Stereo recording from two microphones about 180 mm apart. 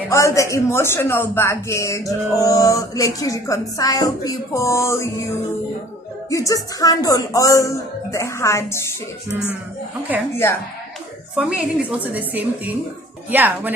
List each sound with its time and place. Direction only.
0.1 s speech: 15° left (ahead or behind)
6.3 s speech: 20° left (ahead or behind)
11.3 s a woman's voice: 5° right (ahead or behind)